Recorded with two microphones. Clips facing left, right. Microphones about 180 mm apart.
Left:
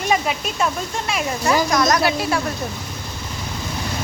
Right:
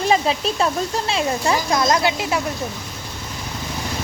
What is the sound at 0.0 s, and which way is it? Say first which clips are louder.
A child's voice: right 3 dB; 30° right (ahead or behind).